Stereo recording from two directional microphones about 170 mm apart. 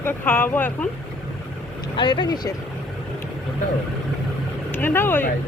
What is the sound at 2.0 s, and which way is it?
Speech, 30° left (ahead or behind).